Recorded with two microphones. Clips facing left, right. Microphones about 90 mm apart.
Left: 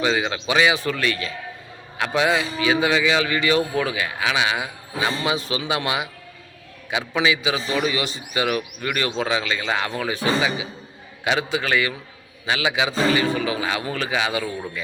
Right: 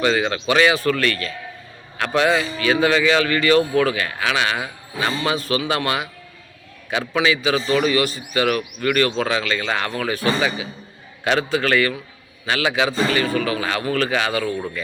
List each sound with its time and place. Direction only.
0.0 s a man's voice: 10° left (ahead or behind)
7.1 s a man's voice: 15° left (ahead or behind)